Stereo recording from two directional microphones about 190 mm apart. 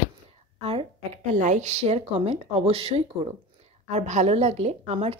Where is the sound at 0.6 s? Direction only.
30° right (ahead or behind).